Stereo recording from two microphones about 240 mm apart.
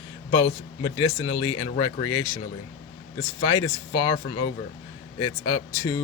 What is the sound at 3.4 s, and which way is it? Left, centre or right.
Speech, centre.